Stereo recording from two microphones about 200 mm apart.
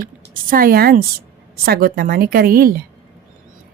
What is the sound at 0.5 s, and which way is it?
A woman's voice, 45° right (ahead or behind).